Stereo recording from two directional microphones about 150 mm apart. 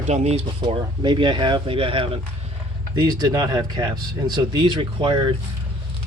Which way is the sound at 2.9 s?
25° right (ahead or behind).